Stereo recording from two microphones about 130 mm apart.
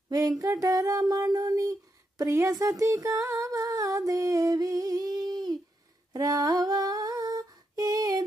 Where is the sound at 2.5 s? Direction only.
25° right (ahead or behind).